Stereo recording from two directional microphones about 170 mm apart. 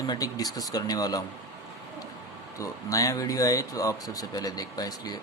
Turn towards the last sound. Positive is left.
turn(degrees=20)  # may be behind; listen again after turning